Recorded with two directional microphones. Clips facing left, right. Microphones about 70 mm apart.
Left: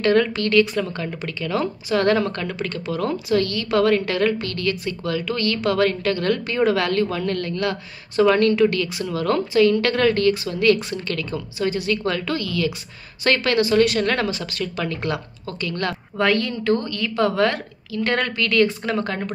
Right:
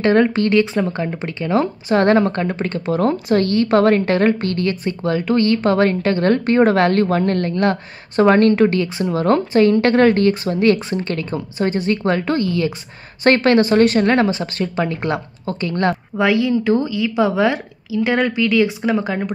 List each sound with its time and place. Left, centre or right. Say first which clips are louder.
0.0 s speech: right 4 dB; right
16.2 s a woman's voice: right 4 dB; centre